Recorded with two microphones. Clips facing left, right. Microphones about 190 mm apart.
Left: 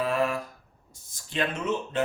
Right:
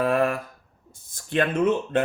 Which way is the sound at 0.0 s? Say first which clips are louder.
Right 4 dB; 55° right (ahead or behind).